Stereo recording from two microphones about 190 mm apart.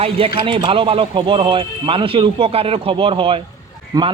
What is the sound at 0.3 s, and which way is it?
A man's voice, 25° right (ahead or behind).